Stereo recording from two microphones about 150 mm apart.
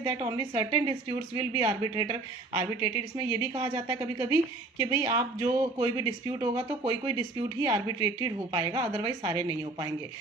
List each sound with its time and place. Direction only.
0.0 s a woman's voice: 30° right (ahead or behind)